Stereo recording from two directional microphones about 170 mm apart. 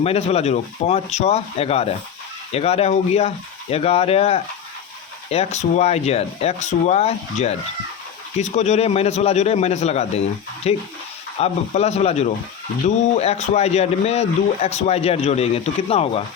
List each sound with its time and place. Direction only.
0.0 s speech: 35° left (ahead or behind)